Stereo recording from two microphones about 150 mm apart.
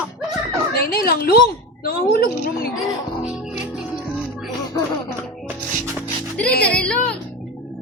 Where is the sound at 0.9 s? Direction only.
75° left (ahead or behind).